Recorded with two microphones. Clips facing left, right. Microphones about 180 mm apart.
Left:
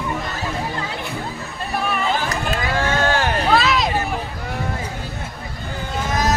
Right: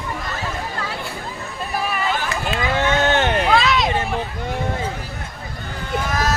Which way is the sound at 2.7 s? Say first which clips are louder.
Right 2 dB; 25° right (ahead or behind).